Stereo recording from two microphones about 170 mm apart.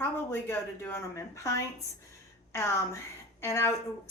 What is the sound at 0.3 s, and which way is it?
A woman's voice, 15° left (ahead or behind).